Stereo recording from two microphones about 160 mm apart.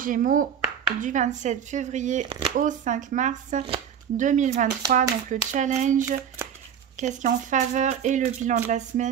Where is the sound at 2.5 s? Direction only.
50° right (ahead or behind).